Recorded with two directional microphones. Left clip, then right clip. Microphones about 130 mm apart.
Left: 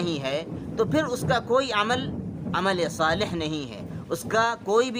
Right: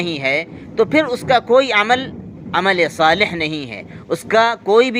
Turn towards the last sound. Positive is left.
turn(degrees=-25)  # may be behind; listen again after turning